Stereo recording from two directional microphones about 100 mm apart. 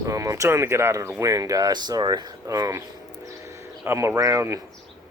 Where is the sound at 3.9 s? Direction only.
30° right (ahead or behind).